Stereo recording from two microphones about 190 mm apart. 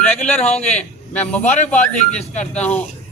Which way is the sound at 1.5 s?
40° left (ahead or behind).